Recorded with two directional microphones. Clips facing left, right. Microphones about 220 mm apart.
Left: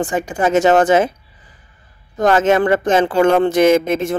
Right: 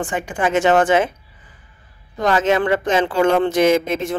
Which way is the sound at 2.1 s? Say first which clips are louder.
Left 4 dB; 50° left (ahead or behind).